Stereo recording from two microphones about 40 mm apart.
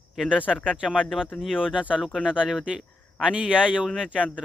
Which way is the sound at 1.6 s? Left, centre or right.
Centre.